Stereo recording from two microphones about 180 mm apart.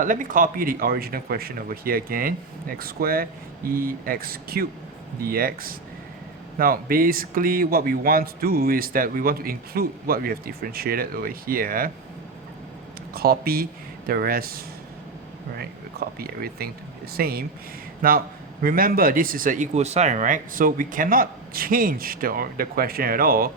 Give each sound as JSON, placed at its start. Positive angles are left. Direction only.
{"t": 0.0, "sound": "speech", "side_deg": -45}
{"t": 13.1, "sound": "speech", "side_deg": -55}